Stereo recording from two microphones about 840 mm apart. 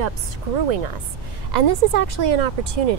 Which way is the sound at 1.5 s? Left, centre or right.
Right.